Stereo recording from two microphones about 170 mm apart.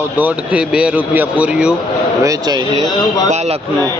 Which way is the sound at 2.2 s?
20° right (ahead or behind).